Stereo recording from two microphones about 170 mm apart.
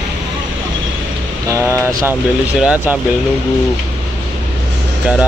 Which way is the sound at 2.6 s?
5° right (ahead or behind).